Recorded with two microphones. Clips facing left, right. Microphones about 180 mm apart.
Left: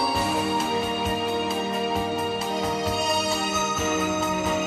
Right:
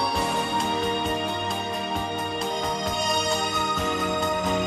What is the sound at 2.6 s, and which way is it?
Music, 5° left (ahead or behind).